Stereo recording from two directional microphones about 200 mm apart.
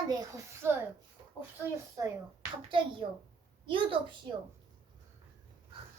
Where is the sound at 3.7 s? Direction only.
25° right (ahead or behind).